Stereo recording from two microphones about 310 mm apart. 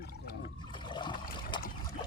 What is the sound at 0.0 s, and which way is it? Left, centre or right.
Water, left.